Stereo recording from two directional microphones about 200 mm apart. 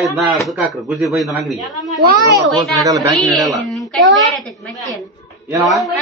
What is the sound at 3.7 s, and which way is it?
Speech, centre (ahead or behind).